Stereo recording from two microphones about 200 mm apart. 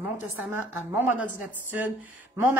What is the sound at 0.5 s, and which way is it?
A man's voice, 10° right (ahead or behind).